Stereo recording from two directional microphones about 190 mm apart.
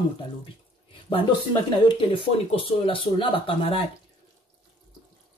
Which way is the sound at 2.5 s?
30° left (ahead or behind).